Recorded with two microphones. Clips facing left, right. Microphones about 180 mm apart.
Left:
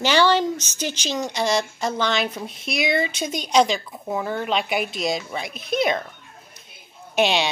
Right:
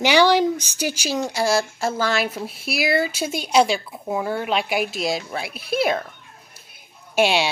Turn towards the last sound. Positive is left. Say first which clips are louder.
# right 1 dB
turn(degrees=-5)  # may be behind; listen again after turning